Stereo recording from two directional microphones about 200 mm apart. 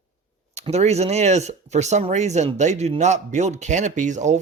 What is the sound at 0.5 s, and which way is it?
Speech, 35° right (ahead or behind).